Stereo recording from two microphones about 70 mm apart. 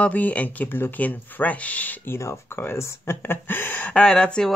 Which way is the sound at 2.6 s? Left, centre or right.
Left.